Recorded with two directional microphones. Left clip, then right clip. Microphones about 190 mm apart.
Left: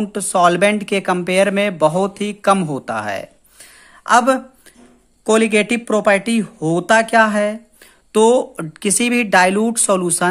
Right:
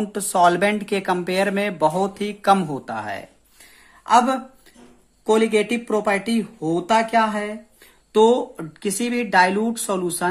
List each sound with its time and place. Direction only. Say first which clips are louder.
0.0 s a woman's voice: left 3 dB; 25° left (ahead or behind); by 10.2 s 45° left (ahead or behind)